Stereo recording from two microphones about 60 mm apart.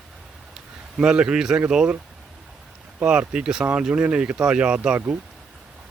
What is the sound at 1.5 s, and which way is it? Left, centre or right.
Speech, centre.